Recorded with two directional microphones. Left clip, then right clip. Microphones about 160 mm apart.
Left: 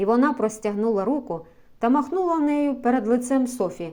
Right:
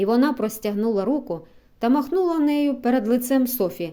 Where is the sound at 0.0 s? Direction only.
30° right (ahead or behind).